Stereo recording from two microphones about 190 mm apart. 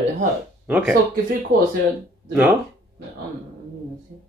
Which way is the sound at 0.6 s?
Centre (ahead or behind).